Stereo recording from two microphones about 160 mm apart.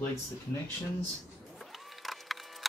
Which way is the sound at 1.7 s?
Centre (ahead or behind).